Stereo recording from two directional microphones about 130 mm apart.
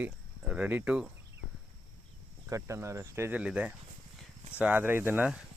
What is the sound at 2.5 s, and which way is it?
Speech, 25° right (ahead or behind).